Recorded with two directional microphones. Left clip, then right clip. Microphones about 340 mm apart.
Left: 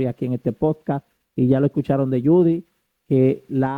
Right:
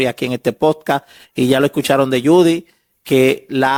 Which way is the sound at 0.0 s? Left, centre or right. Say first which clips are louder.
Right 7 dB; centre.